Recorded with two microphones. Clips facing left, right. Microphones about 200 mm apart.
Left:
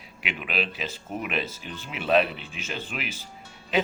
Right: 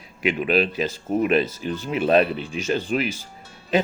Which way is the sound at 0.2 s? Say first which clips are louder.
Right 10 dB; 45° right (ahead or behind).